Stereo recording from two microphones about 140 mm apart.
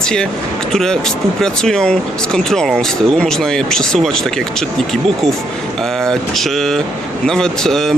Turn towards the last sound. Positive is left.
turn(degrees=0)  # may be behind; listen again after turning